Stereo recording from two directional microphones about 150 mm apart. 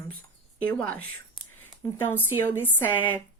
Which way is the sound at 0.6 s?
10° left (ahead or behind).